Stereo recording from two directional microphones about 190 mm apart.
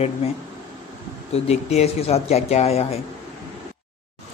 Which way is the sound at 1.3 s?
35° left (ahead or behind).